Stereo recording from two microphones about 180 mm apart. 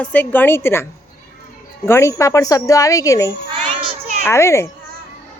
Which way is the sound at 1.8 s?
15° left (ahead or behind).